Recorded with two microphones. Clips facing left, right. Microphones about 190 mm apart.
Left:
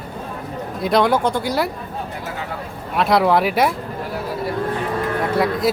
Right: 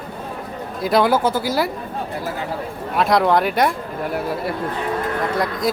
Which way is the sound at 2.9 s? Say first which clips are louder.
Even; centre (ahead or behind).